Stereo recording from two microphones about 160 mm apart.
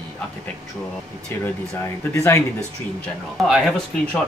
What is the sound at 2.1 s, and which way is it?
Speech, 20° left (ahead or behind).